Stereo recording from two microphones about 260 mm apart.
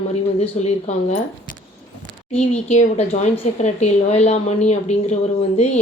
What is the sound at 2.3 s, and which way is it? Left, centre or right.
Speech, left.